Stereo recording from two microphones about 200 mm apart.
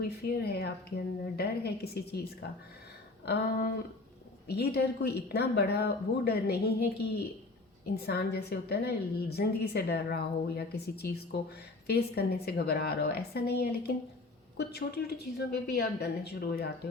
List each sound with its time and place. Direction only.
0.0 s a woman's voice: 50° left (ahead or behind)
4.4 s a woman's voice: 55° left (ahead or behind)